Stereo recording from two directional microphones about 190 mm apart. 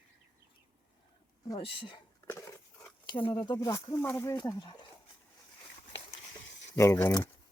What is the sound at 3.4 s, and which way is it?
Speech, 20° left (ahead or behind).